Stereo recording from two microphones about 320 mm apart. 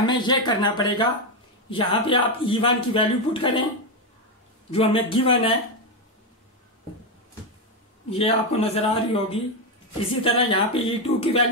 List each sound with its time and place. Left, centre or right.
0.0 s a man's voice: centre
4.7 s a man's voice: centre
8.1 s a man's voice: centre